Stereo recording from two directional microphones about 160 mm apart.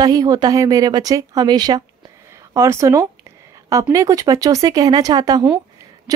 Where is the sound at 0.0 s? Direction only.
25° right (ahead or behind).